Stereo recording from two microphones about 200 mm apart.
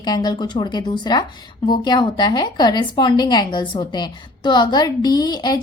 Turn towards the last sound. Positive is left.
turn(degrees=20)  # may be behind; listen again after turning